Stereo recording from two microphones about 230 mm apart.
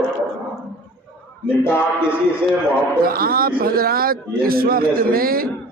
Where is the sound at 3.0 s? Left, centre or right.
Right.